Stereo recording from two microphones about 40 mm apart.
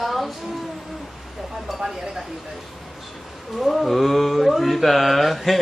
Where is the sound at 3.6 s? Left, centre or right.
Centre.